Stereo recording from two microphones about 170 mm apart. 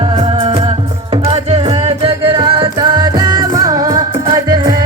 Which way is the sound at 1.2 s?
35° right (ahead or behind).